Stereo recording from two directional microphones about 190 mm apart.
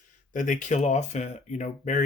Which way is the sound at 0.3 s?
45° left (ahead or behind).